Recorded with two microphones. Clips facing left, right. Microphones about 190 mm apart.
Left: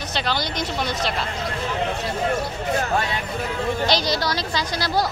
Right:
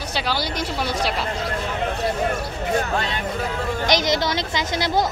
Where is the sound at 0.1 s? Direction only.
10° right (ahead or behind).